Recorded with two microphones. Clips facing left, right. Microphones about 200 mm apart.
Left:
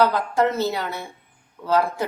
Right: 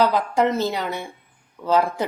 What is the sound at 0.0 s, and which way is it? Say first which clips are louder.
Speech: even; 15° right (ahead or behind).